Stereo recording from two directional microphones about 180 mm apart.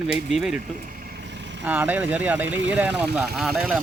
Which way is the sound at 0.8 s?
50° right (ahead or behind).